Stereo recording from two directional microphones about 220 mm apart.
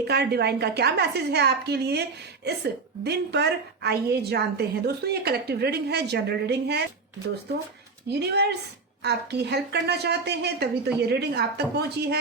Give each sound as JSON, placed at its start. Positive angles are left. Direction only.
{"t": 0.1, "sound": "a woman's voice", "side_deg": -50}
{"t": 8.1, "sound": "a woman's voice", "side_deg": -50}